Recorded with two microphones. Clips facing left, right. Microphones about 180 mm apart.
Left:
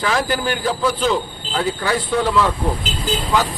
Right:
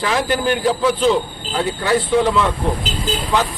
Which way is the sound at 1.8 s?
Centre (ahead or behind).